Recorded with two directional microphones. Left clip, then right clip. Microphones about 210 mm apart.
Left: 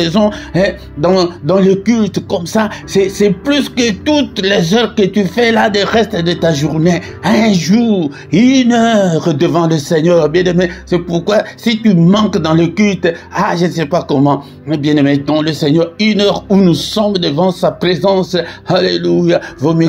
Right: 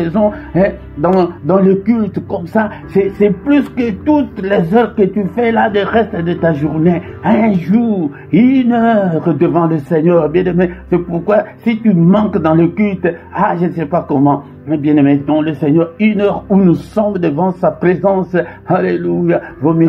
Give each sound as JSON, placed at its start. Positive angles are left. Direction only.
{"t": 0.0, "sound": "music", "side_deg": 30}
{"t": 1.5, "sound": "music", "side_deg": 40}
{"t": 12.1, "sound": "speech", "side_deg": 40}
{"t": 12.4, "sound": "music", "side_deg": 40}